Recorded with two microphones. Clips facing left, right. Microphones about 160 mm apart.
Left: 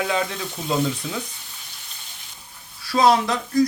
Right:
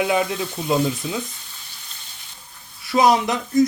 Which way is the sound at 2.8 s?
20° right (ahead or behind).